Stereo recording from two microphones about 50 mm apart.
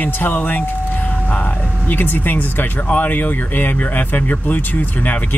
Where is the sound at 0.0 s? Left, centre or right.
Left.